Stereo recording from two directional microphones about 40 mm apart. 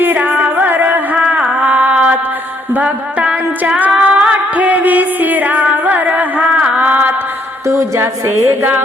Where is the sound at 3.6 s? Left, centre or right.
Right.